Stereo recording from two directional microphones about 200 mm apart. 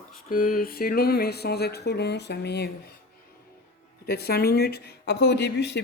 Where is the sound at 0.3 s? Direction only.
45° left (ahead or behind).